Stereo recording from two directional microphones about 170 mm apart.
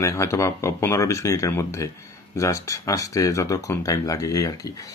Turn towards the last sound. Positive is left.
turn(degrees=20)  # may be behind; listen again after turning